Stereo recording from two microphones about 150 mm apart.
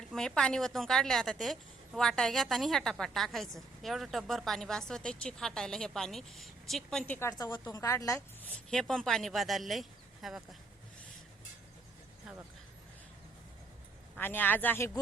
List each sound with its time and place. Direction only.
0.1 s a woman's voice: 5° left (ahead or behind)
7.1 s a woman's voice: 15° left (ahead or behind)
8.7 s a woman's voice: 5° left (ahead or behind)
14.2 s speech: 15° left (ahead or behind)